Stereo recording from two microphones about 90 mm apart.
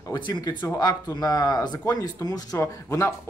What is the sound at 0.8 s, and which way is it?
Speech, 45° left (ahead or behind).